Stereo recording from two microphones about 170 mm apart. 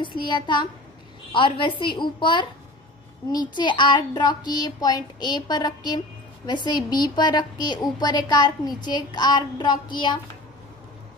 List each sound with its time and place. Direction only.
0.0 s speech: 30° left (ahead or behind)
3.4 s speech: 25° left (ahead or behind)